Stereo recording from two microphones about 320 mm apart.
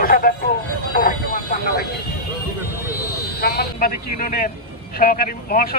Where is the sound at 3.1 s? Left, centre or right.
Left.